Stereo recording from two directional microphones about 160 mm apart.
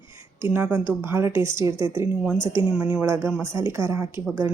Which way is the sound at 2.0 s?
5° right (ahead or behind).